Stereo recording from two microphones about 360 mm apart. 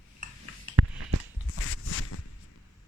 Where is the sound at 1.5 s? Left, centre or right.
Left.